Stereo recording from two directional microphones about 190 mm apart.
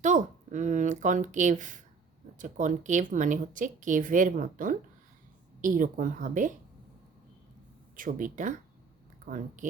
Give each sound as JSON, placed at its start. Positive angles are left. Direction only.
{"t": 0.0, "sound": "speech", "side_deg": -40}
{"t": 7.9, "sound": "speech", "side_deg": -45}